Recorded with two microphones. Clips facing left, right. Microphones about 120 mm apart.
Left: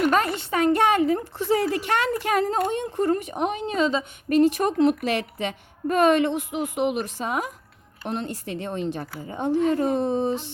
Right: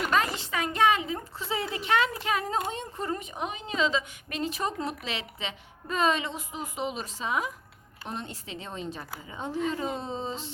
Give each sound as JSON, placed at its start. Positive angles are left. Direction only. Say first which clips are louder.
{"t": 0.1, "sound": "a woman's voice", "louder": "left 5 dB", "side_deg": 55}